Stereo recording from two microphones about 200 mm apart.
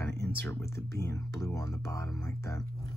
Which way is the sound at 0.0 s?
10° left (ahead or behind).